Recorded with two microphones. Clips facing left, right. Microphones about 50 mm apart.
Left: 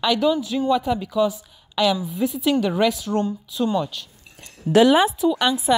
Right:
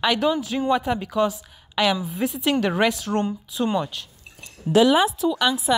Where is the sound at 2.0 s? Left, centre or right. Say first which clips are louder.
Left 2 dB; right.